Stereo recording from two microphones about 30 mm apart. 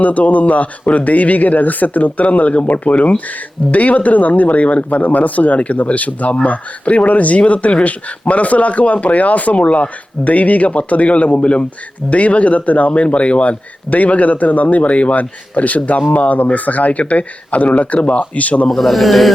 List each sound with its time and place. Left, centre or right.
0.0 s speech: left
12.9 s speech: left
13.9 s speech: left
18.8 s speech: centre